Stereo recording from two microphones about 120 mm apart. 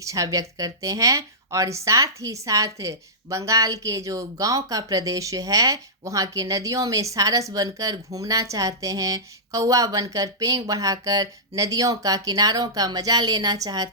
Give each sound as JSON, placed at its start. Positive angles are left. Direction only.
{"t": 0.0, "sound": "a woman's voice", "side_deg": -25}